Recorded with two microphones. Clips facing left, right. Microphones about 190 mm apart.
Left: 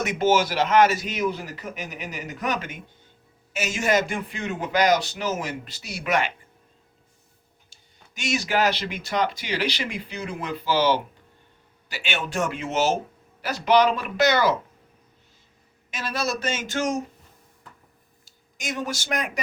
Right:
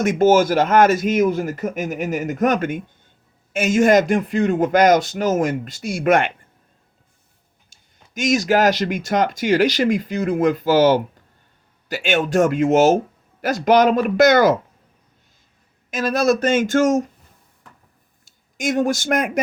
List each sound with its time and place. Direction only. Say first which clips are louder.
0.0 s speech: right 7 dB; 45° right (ahead or behind)
7.7 s speech: right 11 dB; 45° right (ahead or behind)
15.9 s speech: right 11 dB; 45° right (ahead or behind)
18.3 s speech: right 11 dB; 50° right (ahead or behind)